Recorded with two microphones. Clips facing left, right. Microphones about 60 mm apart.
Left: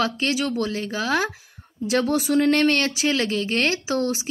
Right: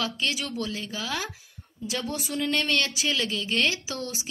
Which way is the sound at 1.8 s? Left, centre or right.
Left.